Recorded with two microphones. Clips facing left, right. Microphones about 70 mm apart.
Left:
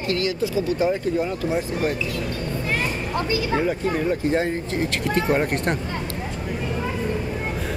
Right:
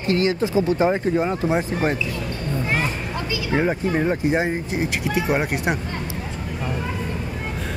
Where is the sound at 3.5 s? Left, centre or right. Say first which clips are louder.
Right 4 dB; right.